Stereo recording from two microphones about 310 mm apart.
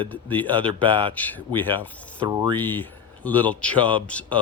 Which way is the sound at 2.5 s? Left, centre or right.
Centre.